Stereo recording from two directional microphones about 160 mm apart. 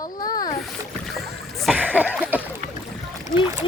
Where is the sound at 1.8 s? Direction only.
10° right (ahead or behind).